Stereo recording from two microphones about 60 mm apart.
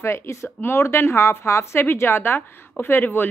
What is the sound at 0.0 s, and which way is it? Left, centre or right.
A woman's voice, left.